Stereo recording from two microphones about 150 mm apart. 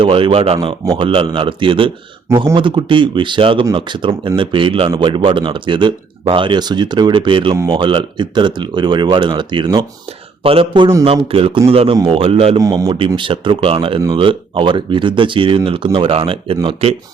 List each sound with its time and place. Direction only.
0.0 s a man's voice: 35° right (ahead or behind)
12.5 s a man's voice: 25° right (ahead or behind)